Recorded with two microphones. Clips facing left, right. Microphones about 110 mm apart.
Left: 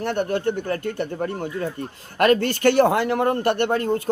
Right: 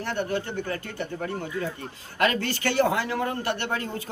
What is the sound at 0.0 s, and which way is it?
A man's voice, 55° left (ahead or behind).